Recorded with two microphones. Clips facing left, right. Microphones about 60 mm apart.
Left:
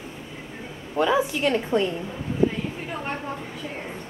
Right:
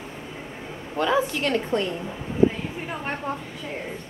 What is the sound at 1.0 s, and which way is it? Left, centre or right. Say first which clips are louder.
Speech: left 1 dB; centre.